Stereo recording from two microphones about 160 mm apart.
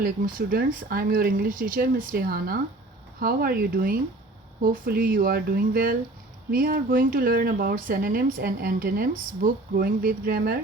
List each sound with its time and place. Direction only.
0.3 s a woman's voice: 65° right (ahead or behind)